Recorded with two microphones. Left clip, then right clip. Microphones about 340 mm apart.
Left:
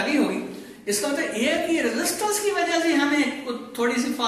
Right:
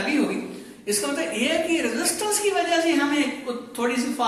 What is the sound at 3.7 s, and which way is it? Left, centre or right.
Speech, centre.